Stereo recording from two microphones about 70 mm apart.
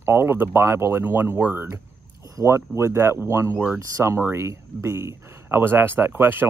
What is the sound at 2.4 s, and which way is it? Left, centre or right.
Speech, right.